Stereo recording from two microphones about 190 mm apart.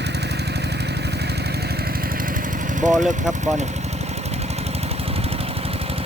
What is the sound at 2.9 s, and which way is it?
Speech, centre (ahead or behind).